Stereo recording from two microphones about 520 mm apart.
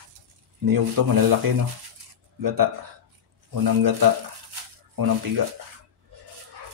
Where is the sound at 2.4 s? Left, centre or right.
Right.